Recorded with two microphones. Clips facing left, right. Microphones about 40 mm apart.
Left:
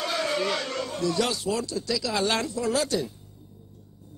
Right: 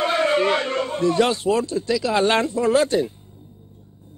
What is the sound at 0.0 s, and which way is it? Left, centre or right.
A man's voice, right.